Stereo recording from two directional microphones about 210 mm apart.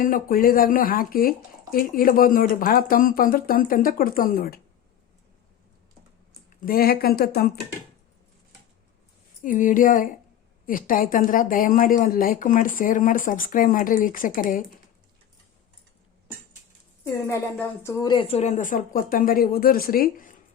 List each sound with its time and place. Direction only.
0.0 s speech: 40° left (ahead or behind)
6.6 s speech: 45° left (ahead or behind)
9.4 s speech: 40° left (ahead or behind)
17.0 s speech: 15° left (ahead or behind); by 20.3 s 40° left (ahead or behind)